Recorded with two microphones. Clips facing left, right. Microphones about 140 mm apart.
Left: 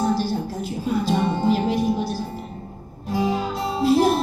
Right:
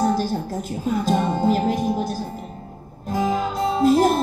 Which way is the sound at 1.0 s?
45° right (ahead or behind).